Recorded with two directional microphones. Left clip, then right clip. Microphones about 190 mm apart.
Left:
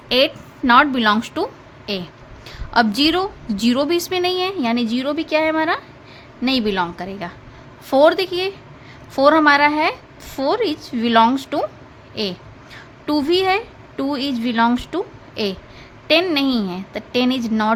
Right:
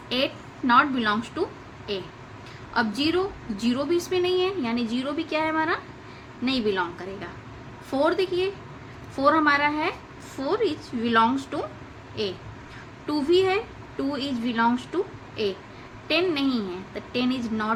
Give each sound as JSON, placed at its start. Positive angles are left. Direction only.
{"t": 0.7, "sound": "a woman's voice", "side_deg": 65}